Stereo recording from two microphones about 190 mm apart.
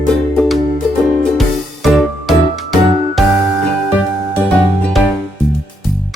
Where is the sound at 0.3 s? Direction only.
Centre (ahead or behind).